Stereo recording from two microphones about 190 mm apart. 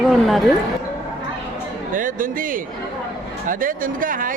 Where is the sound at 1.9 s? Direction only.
45° right (ahead or behind).